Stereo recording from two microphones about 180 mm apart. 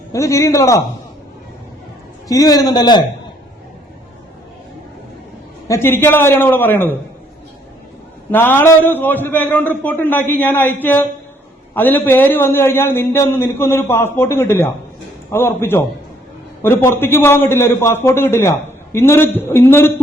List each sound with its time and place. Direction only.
0.1 s a man's voice: 15° left (ahead or behind)
2.2 s a man's voice: 20° left (ahead or behind)
5.6 s a man's voice: 15° left (ahead or behind)
8.3 s a man's voice: 10° left (ahead or behind)